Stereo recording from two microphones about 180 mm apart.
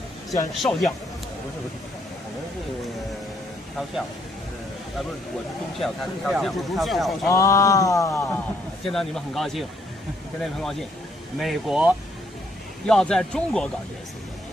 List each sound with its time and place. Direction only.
0.6 s speech: 5° left (ahead or behind)
5.8 s speech: centre (ahead or behind)
7.2 s a sound: 15° left (ahead or behind)
8.8 s speech: centre (ahead or behind)